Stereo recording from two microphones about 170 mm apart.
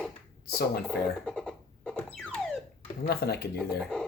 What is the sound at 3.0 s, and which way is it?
Speech, 70° left (ahead or behind).